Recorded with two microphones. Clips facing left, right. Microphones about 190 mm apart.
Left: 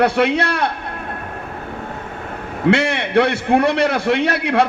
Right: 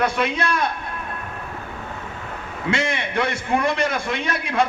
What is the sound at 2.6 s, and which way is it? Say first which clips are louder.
A man's voice: left 7 dB; 65° left (ahead or behind).